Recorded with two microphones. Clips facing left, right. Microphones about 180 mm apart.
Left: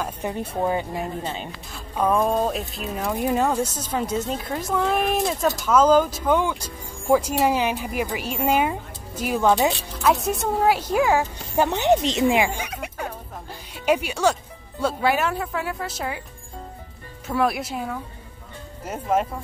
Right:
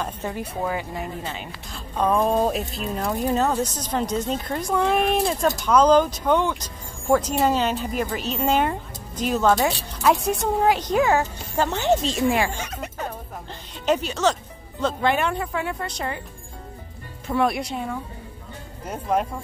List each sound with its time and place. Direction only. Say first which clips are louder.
0.3 s speech: left 5 dB; 25° left (ahead or behind)
1.7 s speech: even; 5° left (ahead or behind)
10.0 s speech: right 1 dB; centre (ahead or behind)
17.3 s speech: right 1 dB; centre (ahead or behind)